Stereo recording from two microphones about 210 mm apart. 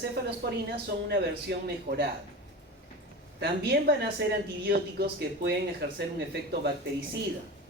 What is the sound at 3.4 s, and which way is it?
Speech, 50° right (ahead or behind).